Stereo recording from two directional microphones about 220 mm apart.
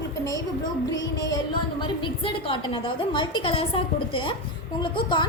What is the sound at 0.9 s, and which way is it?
A woman's voice, 15° left (ahead or behind).